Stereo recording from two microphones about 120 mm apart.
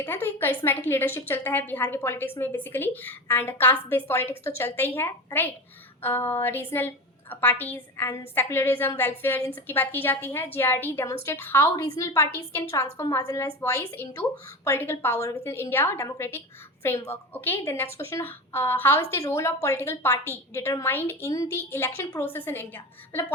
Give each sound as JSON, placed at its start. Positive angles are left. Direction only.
{"t": 0.0, "sound": "a woman's voice", "side_deg": 20}